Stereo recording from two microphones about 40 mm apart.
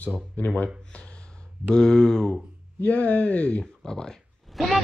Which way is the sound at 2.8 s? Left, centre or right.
Left.